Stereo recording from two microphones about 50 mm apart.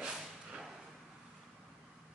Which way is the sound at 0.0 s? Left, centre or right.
Centre.